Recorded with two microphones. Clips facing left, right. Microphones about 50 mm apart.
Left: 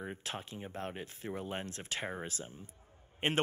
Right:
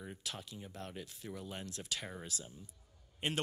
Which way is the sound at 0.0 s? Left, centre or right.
Left.